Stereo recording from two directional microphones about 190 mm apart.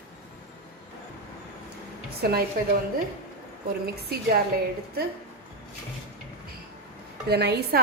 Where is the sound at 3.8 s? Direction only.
55° right (ahead or behind).